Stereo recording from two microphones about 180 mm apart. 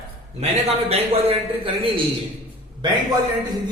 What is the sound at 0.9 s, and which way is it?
A man's voice, 35° right (ahead or behind).